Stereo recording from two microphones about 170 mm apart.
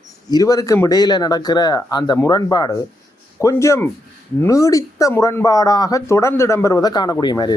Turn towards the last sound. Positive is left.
turn(degrees=25)  # may be behind; listen again after turning